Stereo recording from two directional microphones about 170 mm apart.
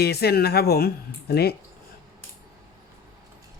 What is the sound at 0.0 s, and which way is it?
Speech, 70° left (ahead or behind).